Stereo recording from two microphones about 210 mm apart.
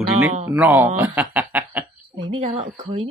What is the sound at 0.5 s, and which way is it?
Speech, 10° right (ahead or behind).